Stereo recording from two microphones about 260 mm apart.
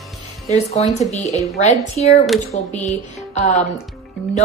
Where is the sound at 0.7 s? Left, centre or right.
Left.